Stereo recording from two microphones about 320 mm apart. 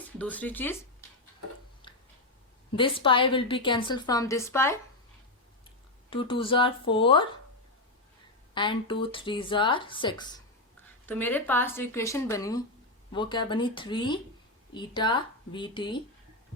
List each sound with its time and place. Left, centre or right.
0.2 s speech: centre
1.8 s a sound: centre
2.7 s a woman's voice: centre
6.1 s a woman's voice: centre
8.5 s a woman's voice: centre